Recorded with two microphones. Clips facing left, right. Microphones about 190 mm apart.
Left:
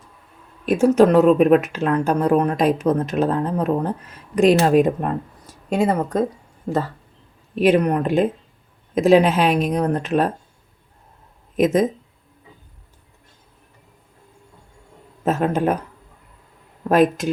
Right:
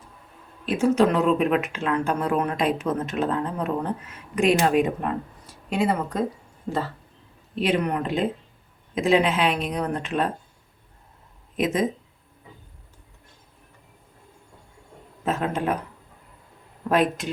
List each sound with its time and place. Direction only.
0.6 s speech: 45° left (ahead or behind)
7.6 s speech: 50° left (ahead or behind)
11.5 s speech: 45° left (ahead or behind)
15.2 s speech: 40° left (ahead or behind)
16.9 s speech: 45° left (ahead or behind)